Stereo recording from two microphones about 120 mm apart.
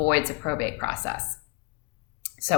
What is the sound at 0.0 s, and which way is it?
A woman's voice, 25° left (ahead or behind).